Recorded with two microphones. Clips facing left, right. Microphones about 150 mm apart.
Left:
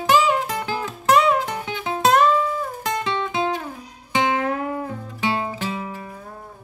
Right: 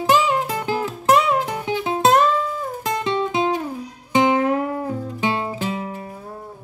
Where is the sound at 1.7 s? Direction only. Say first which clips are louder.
Right 2 dB; 25° right (ahead or behind).